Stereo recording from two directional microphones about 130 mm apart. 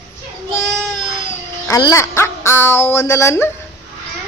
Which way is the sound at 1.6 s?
25° left (ahead or behind).